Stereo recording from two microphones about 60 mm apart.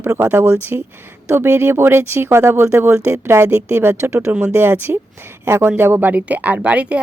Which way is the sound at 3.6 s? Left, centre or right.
Right.